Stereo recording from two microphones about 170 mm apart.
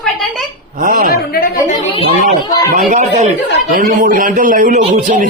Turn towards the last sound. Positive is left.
turn(degrees=-45)  # may be behind; listen again after turning